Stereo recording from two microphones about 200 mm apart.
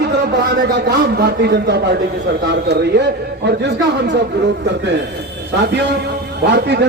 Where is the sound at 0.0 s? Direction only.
55° right (ahead or behind).